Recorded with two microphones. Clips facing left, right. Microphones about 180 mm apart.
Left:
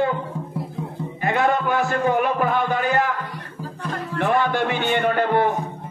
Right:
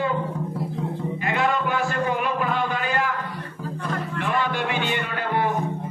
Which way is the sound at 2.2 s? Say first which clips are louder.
Left 4 dB; 50° left (ahead or behind).